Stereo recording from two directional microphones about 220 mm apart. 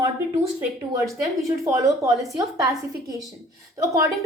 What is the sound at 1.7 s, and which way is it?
Speech, 15° right (ahead or behind).